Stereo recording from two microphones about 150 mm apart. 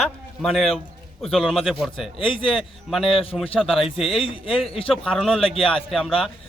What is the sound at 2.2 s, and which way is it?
Speech, 35° left (ahead or behind).